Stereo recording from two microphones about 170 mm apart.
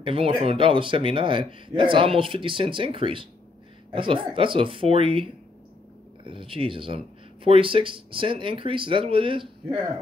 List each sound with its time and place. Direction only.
0.0 s speech: 30° right (ahead or behind)